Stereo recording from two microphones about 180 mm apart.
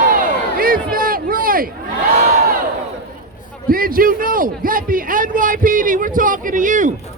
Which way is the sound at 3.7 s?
55° right (ahead or behind).